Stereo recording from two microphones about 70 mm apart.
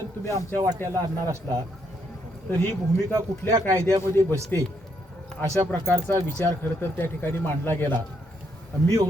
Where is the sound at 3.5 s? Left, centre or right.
Right.